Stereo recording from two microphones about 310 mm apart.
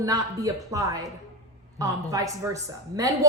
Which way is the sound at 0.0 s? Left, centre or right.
Centre.